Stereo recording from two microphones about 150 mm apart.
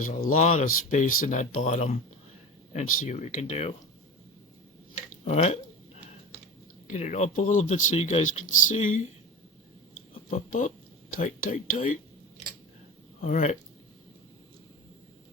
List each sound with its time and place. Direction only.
0.0 s speech: 55° left (ahead or behind)
5.2 s speech: 45° left (ahead or behind)
6.8 s speech: 50° left (ahead or behind)
10.3 s speech: 45° left (ahead or behind)
11.1 s speech: 65° left (ahead or behind)